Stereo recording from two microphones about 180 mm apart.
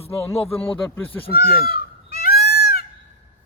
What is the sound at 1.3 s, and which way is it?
Honk, 55° left (ahead or behind).